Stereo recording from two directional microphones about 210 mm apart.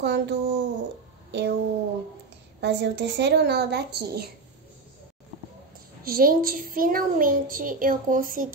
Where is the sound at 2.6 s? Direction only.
55° right (ahead or behind).